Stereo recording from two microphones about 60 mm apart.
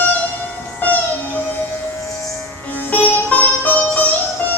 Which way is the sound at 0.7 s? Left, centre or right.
Left.